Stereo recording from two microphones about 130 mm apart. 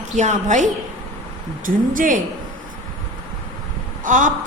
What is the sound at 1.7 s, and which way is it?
Speech, 90° right.